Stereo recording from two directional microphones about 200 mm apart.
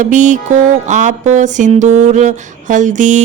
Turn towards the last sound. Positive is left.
turn(degrees=-40)  # may be behind; listen again after turning